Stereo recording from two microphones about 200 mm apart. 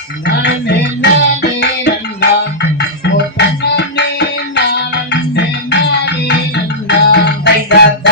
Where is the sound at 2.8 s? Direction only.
55° left (ahead or behind).